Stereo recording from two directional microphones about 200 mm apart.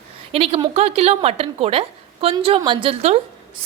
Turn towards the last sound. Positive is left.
turn(degrees=-30)  # may be behind; listen again after turning